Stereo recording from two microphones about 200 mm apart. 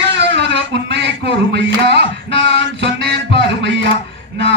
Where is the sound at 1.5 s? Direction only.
60° right (ahead or behind).